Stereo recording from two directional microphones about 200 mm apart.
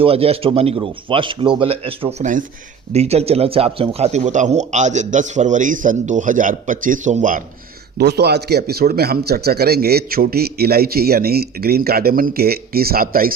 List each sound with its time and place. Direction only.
0.0 s a man's voice: 30° right (ahead or behind)
7.9 s a man's voice: 55° right (ahead or behind)